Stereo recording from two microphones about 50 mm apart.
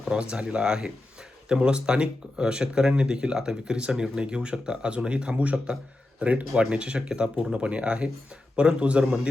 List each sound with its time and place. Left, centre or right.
0.0 s speech: centre